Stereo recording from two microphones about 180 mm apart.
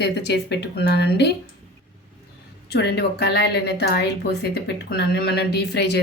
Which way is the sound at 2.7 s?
65° left (ahead or behind).